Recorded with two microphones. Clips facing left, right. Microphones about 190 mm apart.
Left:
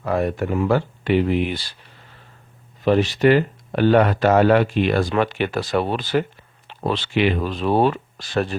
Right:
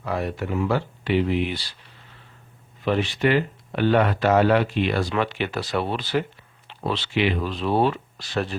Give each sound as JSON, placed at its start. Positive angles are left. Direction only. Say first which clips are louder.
{"t": 0.0, "sound": "speech", "louder": "left 6 dB", "side_deg": 50}
{"t": 2.8, "sound": "speech", "louder": "left 6 dB", "side_deg": 40}